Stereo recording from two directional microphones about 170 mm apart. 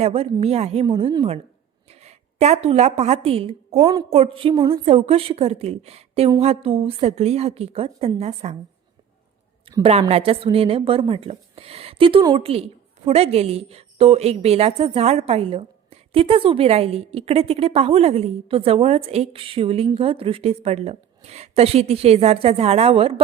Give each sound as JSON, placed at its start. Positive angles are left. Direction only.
{"t": 0.0, "sound": "a woman's voice", "side_deg": -35}
{"t": 9.8, "sound": "a woman's voice", "side_deg": -35}